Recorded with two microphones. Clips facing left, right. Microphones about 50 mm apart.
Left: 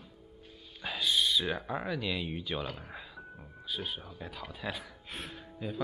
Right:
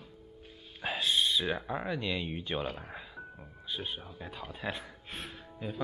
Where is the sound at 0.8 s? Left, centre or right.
Centre.